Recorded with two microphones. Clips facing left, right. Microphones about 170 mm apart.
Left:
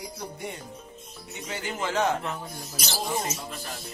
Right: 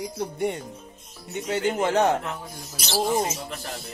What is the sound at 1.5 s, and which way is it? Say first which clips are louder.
Speech: right 8 dB; 60° right (ahead or behind).